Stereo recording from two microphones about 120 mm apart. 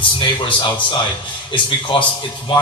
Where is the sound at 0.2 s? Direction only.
40° left (ahead or behind).